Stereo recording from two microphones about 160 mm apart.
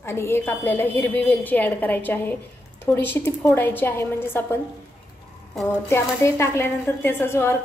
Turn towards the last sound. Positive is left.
turn(degrees=15)  # may be behind; listen again after turning